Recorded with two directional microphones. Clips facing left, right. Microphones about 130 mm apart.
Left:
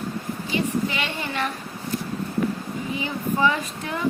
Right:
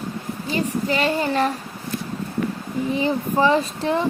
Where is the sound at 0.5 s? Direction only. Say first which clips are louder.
Right 2 dB; 40° right (ahead or behind).